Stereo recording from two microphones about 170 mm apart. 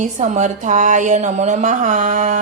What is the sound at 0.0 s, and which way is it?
A woman's voice, 45° right (ahead or behind).